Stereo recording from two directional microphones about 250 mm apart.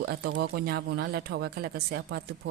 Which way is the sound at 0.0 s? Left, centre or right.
Right.